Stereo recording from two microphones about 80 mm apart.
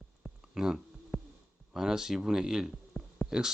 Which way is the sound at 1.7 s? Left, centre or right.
Centre.